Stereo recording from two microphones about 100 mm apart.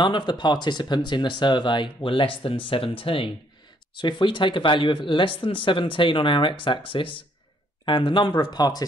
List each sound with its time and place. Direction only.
0.0 s speech: 50° left (ahead or behind)
2.0 s speech: 60° left (ahead or behind)
3.9 s speech: 55° left (ahead or behind)